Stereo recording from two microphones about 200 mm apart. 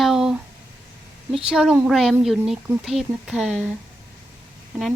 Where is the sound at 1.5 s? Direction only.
Centre (ahead or behind).